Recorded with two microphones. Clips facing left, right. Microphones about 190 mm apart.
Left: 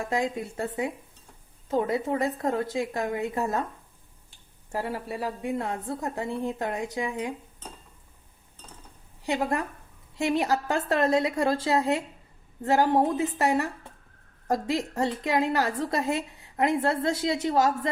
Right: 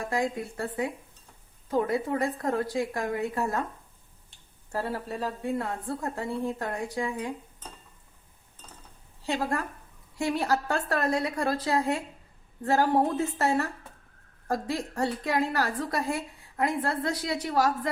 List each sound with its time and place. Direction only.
0.0 s a woman's voice: 20° left (ahead or behind)
4.7 s a woman's voice: 15° left (ahead or behind)
9.2 s a woman's voice: 20° left (ahead or behind)